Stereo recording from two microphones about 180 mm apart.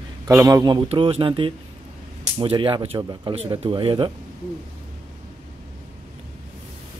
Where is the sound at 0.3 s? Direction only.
15° right (ahead or behind).